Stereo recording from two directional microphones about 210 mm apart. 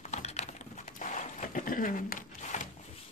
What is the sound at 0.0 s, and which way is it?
Typing, 30° left (ahead or behind).